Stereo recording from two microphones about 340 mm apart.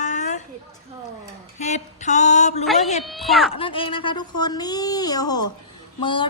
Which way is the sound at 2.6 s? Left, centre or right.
Centre.